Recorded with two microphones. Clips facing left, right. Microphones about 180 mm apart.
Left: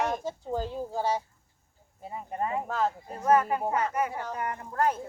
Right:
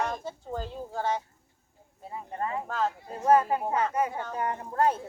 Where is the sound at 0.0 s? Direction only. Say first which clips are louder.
Left 2 dB; 10° left (ahead or behind).